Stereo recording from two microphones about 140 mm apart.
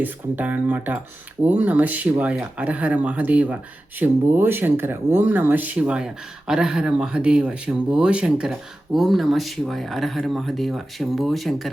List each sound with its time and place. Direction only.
0.0 s speech: 10° right (ahead or behind)